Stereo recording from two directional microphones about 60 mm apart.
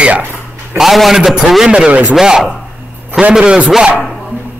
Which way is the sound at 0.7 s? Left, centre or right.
Centre.